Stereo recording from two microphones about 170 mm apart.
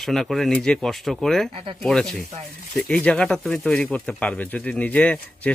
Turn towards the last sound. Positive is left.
turn(degrees=10)  # may be behind; listen again after turning